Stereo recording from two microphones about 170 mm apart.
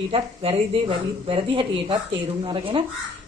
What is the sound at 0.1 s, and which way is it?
Speech, 35° right (ahead or behind).